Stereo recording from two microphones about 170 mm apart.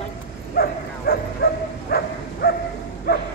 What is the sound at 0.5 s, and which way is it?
Speech, 65° left (ahead or behind).